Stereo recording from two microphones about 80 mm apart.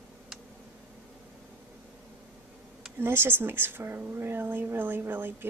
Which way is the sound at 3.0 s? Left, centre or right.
Right.